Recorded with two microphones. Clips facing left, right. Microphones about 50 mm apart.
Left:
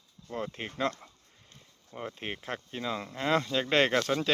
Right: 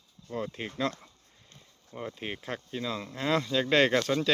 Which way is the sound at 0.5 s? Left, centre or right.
Left.